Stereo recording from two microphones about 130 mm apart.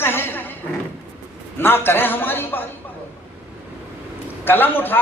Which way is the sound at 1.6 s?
15° left (ahead or behind).